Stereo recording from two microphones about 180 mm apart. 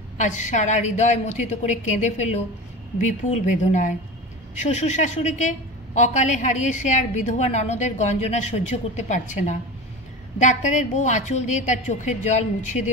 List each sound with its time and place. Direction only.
0.2 s a woman's voice: 45° left (ahead or behind)